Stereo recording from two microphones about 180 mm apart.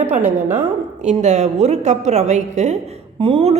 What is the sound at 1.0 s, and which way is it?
A woman's voice, 40° right (ahead or behind).